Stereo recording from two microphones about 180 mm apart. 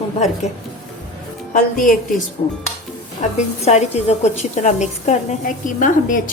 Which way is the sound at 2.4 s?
35° left (ahead or behind).